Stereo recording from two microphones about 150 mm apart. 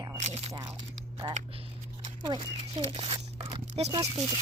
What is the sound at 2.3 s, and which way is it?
Speech, 35° right (ahead or behind).